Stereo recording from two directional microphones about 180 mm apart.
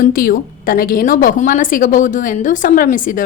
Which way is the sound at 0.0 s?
50° left (ahead or behind).